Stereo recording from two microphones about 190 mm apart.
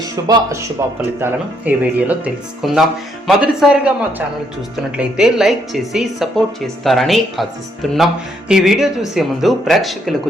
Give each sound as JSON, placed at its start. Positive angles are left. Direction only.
{"t": 0.2, "sound": "speech", "side_deg": -20}